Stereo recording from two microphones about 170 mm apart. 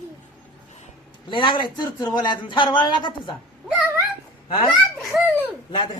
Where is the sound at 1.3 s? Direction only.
30° left (ahead or behind).